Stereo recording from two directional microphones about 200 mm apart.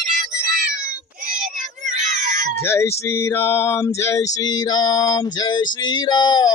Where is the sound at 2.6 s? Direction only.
10° left (ahead or behind).